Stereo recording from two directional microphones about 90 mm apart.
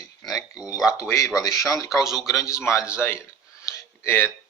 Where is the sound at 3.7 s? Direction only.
35° left (ahead or behind).